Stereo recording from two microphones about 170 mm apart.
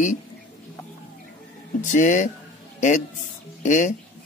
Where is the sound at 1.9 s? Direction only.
45° left (ahead or behind).